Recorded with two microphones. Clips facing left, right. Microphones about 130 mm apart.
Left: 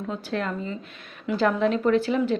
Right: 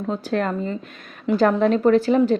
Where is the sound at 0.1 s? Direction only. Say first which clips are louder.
Right 6 dB; 40° right (ahead or behind).